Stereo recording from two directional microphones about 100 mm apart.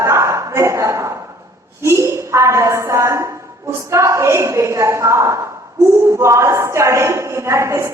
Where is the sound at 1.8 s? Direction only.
30° right (ahead or behind).